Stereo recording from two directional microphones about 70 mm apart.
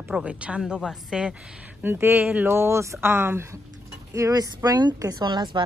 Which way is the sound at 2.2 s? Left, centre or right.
Centre.